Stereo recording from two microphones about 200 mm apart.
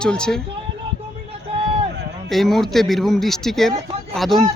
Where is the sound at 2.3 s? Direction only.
Centre (ahead or behind).